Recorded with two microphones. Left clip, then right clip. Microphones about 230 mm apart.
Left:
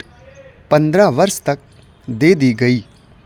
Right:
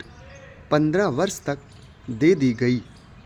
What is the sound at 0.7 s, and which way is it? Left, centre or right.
Speech, left.